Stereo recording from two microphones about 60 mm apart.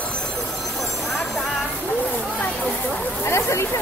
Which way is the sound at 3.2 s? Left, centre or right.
Left.